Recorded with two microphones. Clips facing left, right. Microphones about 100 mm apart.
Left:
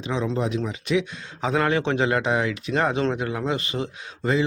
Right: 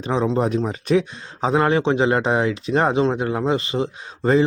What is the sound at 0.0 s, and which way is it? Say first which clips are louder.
A man's voice: right 5 dB; 40° right (ahead or behind).